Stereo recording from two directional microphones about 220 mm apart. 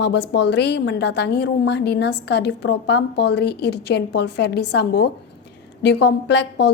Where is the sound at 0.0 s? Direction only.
50° left (ahead or behind).